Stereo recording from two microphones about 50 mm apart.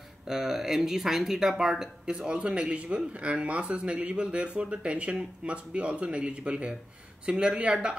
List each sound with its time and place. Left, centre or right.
0.3 s speech: centre